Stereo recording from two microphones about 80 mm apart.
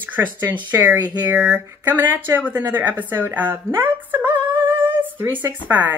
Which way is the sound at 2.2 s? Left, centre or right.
Right.